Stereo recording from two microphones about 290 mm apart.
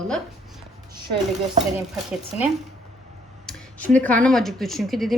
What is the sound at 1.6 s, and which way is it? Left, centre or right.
Speech, right.